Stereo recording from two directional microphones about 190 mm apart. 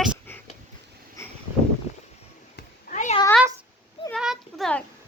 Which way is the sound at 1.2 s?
15° left (ahead or behind).